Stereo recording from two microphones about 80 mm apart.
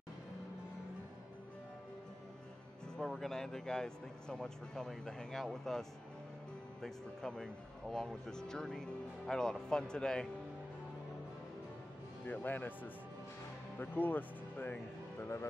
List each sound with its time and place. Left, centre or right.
3.0 s speech: centre
12.3 s speech: left